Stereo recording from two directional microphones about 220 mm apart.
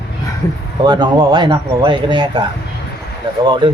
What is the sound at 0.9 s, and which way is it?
Speech, 20° right (ahead or behind).